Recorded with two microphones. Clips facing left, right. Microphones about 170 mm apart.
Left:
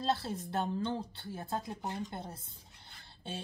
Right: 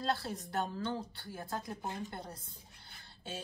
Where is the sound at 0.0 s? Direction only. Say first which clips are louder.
Left 2 dB; 25° left (ahead or behind).